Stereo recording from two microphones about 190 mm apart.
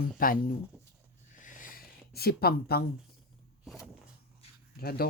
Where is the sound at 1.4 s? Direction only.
45° left (ahead or behind).